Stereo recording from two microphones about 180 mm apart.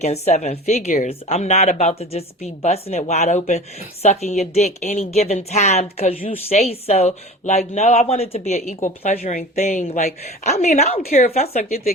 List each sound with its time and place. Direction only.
0.0 s a woman's voice: 35° left (ahead or behind)